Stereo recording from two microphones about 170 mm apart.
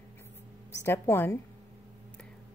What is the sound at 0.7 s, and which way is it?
Speech, 15° left (ahead or behind).